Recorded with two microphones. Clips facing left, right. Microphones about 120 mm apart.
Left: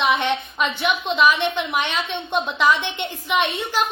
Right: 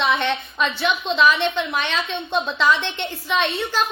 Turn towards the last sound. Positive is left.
turn(degrees=15)  # may be behind; listen again after turning